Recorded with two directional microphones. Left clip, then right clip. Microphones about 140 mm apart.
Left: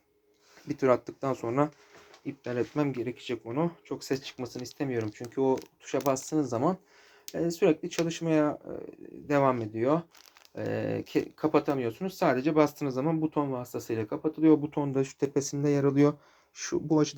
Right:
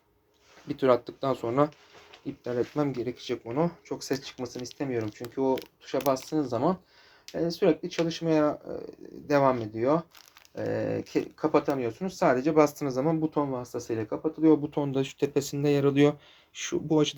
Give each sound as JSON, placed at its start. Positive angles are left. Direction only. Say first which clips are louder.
{"t": 0.8, "sound": "speech", "louder": "right 2 dB", "side_deg": 25}
{"t": 1.5, "sound": "speech", "louder": "right 3 dB", "side_deg": 15}
{"t": 2.5, "sound": "speech", "louder": "right 2 dB", "side_deg": 25}
{"t": 14.6, "sound": "speech", "louder": "right 1 dB", "side_deg": 20}